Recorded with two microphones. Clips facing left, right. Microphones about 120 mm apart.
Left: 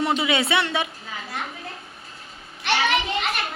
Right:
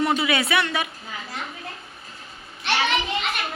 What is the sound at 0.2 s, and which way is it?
Speech, 25° left (ahead or behind).